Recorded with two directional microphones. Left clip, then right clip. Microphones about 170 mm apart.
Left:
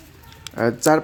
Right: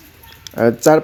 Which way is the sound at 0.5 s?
15° right (ahead or behind).